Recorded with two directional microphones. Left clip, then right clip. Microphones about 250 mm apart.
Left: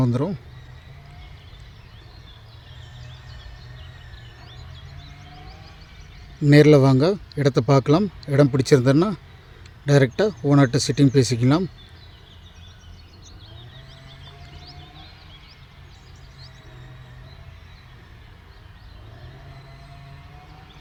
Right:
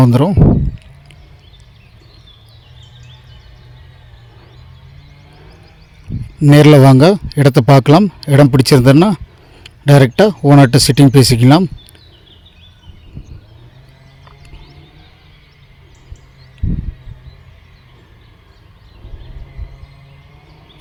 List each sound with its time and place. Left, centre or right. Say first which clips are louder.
0.0 s speech: right 12 dB; right
6.4 s speech: right 7 dB; right